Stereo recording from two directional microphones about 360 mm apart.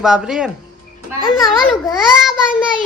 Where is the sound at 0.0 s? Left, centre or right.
Centre.